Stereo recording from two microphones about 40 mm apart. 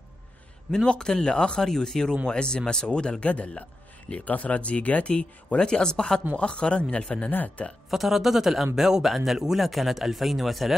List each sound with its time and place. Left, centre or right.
0.8 s speech: centre
3.3 s speech: left
7.2 s speech: left
7.9 s speech: centre